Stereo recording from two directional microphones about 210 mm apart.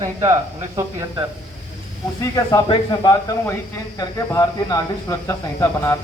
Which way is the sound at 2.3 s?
20° left (ahead or behind).